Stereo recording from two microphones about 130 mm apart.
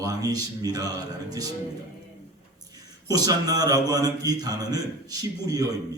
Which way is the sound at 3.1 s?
30° right (ahead or behind).